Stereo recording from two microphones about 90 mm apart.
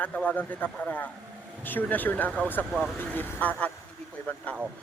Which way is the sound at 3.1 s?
20° left (ahead or behind).